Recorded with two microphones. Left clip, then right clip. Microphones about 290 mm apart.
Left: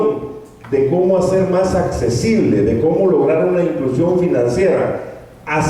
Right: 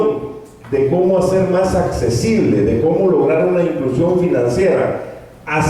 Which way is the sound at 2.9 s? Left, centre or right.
Centre.